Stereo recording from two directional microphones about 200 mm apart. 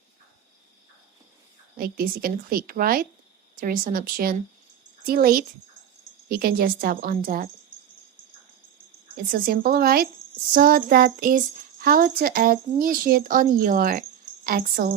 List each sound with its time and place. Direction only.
1.7 s speech: 45° right (ahead or behind)
9.3 s speech: 50° right (ahead or behind)